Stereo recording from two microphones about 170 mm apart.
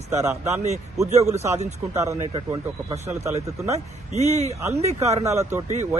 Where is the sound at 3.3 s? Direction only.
40° right (ahead or behind).